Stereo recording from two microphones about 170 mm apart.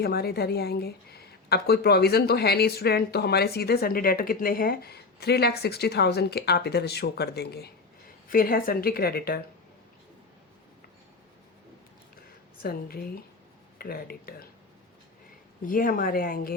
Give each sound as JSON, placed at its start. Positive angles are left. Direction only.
{"t": 0.0, "sound": "a woman's voice", "side_deg": 70}
{"t": 8.3, "sound": "a woman's voice", "side_deg": 55}
{"t": 12.6, "sound": "a woman's voice", "side_deg": 60}
{"t": 15.6, "sound": "a woman's voice", "side_deg": 55}